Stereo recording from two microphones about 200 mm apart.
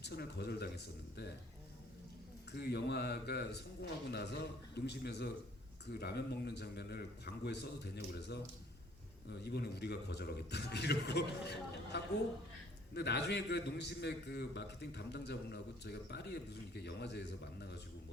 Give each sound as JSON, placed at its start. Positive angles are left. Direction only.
{"t": 0.0, "sound": "a man's voice", "side_deg": 55}
{"t": 2.5, "sound": "a man's voice", "side_deg": 55}